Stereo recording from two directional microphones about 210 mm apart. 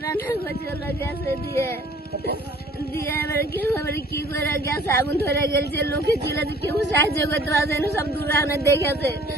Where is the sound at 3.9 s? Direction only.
45° left (ahead or behind).